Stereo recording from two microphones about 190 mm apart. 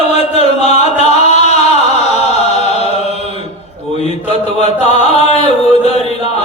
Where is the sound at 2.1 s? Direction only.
35° left (ahead or behind).